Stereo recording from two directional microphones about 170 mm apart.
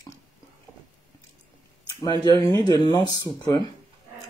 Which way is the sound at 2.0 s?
25° left (ahead or behind).